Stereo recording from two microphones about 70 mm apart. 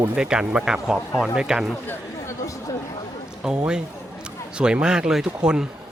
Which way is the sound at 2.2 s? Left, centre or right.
Left.